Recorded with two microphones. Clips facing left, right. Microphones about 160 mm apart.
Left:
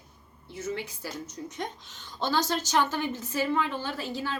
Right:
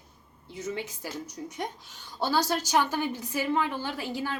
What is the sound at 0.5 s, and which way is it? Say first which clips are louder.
A woman's voice: even; 15° right (ahead or behind).